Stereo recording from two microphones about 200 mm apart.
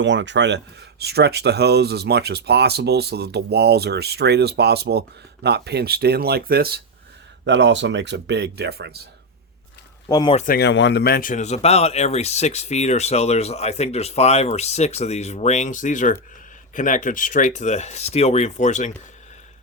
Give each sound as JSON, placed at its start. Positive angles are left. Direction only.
{"t": 0.0, "sound": "speech", "side_deg": -65}
{"t": 7.4, "sound": "speech", "side_deg": -60}
{"t": 10.1, "sound": "speech", "side_deg": 20}
{"t": 10.3, "sound": "speech", "side_deg": 45}